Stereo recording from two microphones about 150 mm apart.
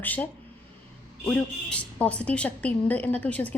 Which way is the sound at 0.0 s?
10° left (ahead or behind).